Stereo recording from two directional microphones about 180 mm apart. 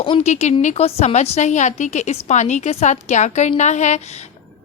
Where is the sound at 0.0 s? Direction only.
30° left (ahead or behind).